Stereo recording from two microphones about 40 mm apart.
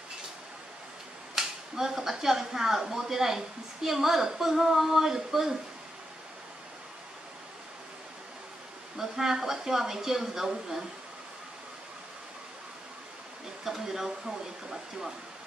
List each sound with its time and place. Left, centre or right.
1.3 s speech: centre
8.9 s speech: centre
13.7 s speech: centre